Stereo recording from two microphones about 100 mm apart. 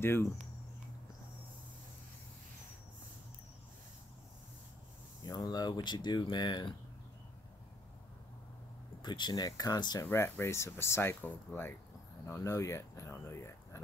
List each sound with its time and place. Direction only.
0.0 s speech: 25° left (ahead or behind)
5.2 s speech: 40° left (ahead or behind)
9.0 s speech: 50° left (ahead or behind)
10.1 s speech: 25° left (ahead or behind)